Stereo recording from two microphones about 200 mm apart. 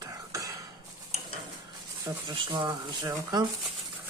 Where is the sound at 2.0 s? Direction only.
20° right (ahead or behind).